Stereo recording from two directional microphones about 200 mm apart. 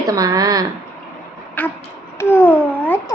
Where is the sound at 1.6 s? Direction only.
5° left (ahead or behind).